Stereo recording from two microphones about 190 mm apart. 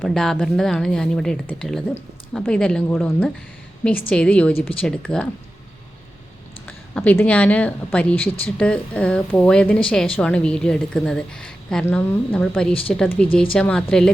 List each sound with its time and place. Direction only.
0.0 s speech: centre (ahead or behind)
6.7 s speech: 10° left (ahead or behind)